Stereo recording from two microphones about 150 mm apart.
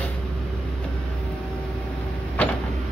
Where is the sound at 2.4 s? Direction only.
10° left (ahead or behind).